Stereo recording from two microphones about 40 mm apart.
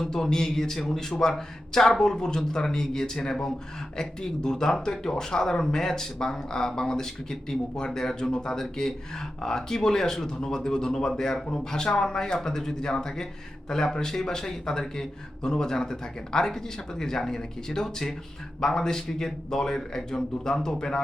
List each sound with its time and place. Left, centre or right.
0.1 s speech: centre